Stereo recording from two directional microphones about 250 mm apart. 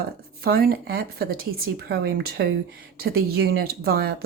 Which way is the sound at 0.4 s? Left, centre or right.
Right.